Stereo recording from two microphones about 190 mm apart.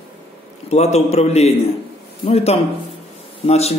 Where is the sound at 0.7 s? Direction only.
35° left (ahead or behind).